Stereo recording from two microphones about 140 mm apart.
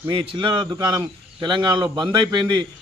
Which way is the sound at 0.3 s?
35° right (ahead or behind).